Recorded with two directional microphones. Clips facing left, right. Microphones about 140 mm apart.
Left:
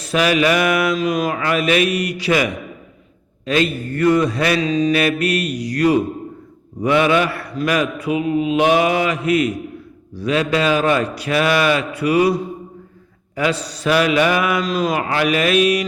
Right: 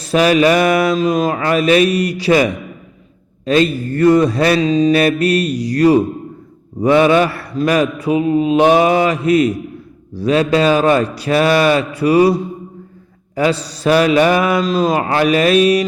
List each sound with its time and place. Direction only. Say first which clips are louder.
0.0 s mantra: right 5 dB; 35° right (ahead or behind)